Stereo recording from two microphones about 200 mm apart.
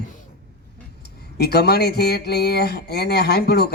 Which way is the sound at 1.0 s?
55° left (ahead or behind).